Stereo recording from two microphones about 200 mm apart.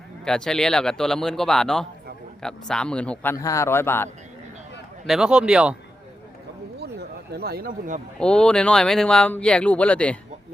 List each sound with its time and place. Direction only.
0.3 s speech: 5° left (ahead or behind)
3.3 s speech: 15° left (ahead or behind)
5.0 s speech: centre (ahead or behind)
7.3 s a man's voice: 50° right (ahead or behind)
8.2 s speech: 5° left (ahead or behind)